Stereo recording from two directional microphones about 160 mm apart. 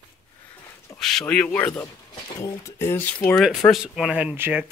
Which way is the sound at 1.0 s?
Centre (ahead or behind).